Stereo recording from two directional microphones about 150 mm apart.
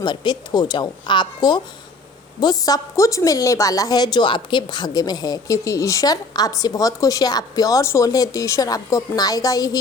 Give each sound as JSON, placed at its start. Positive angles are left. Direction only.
{"t": 0.0, "sound": "a woman's voice", "side_deg": 30}